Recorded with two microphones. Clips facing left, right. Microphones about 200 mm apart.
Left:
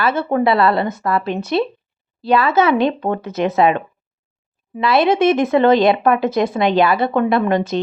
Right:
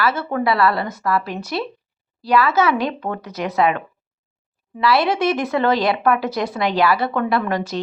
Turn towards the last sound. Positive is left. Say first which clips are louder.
# left 5 dB
turn(degrees=25)  # may be behind; listen again after turning